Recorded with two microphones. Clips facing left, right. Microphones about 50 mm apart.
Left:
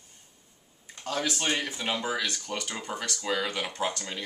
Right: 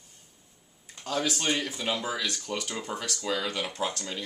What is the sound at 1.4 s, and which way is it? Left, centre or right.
Speech, centre.